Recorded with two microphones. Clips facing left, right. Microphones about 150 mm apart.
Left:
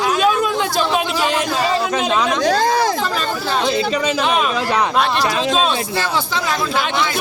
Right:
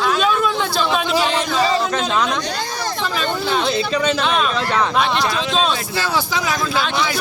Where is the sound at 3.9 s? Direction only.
10° left (ahead or behind).